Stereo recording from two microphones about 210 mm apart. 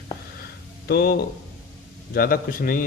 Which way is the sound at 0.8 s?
45° left (ahead or behind).